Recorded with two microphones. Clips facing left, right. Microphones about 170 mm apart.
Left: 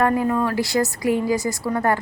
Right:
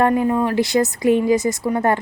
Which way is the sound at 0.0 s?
20° right (ahead or behind).